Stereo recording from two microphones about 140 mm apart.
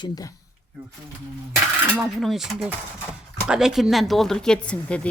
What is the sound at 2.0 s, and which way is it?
A woman's voice, centre (ahead or behind).